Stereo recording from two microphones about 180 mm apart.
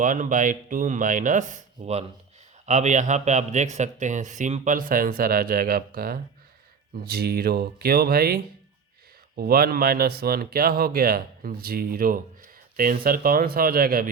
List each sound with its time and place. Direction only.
0.0 s speech: 45° right (ahead or behind)